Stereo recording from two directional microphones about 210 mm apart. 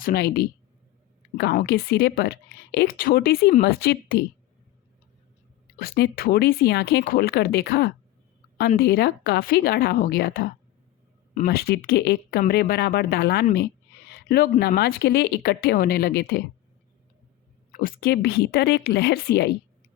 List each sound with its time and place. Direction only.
0.0 s speech: 45° left (ahead or behind)
5.8 s speech: 45° left (ahead or behind)
14.1 s a sound: 50° left (ahead or behind)
14.7 s speech: 45° left (ahead or behind)
17.7 s speech: 45° left (ahead or behind)